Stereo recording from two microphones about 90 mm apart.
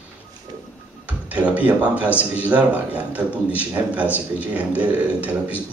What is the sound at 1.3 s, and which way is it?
Speech, 15° right (ahead or behind).